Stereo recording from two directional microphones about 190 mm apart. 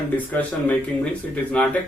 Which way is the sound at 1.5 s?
5° left (ahead or behind).